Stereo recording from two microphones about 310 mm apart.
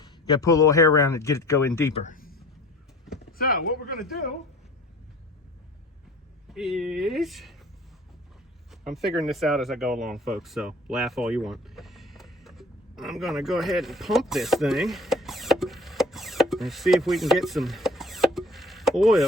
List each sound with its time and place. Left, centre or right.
0.0 s speech: centre
2.0 s a sound: left
3.3 s speech: left
6.5 s speech: centre
8.7 s speech: centre